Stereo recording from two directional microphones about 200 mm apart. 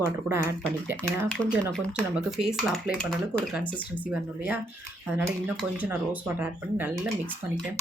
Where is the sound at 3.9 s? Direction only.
10° right (ahead or behind).